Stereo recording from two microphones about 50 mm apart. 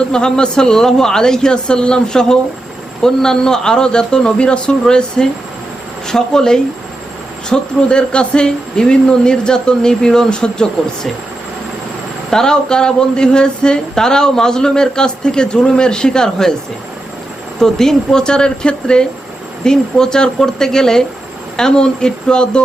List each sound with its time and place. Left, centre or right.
0.1 s speech: centre
12.3 s speech: centre
17.6 s speech: centre